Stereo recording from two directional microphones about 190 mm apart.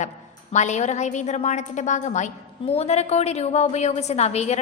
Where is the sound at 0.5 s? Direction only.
40° left (ahead or behind).